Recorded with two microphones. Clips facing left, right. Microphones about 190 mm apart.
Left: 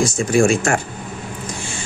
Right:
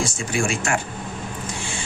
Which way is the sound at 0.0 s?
40° left (ahead or behind).